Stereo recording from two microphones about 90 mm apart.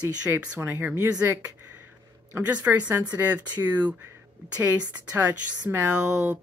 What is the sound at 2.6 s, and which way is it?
Speech, 15° right (ahead or behind).